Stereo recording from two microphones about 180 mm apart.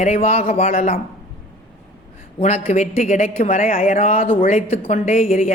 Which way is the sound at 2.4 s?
40° left (ahead or behind).